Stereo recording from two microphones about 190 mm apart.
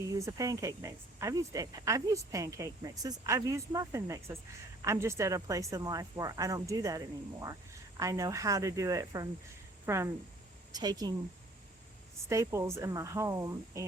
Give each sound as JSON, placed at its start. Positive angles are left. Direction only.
{"t": 0.1, "sound": "speech", "side_deg": -15}
{"t": 12.3, "sound": "speech", "side_deg": -15}